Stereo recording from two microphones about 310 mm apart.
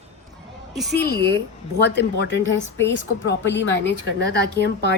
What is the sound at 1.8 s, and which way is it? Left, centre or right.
Speech, left.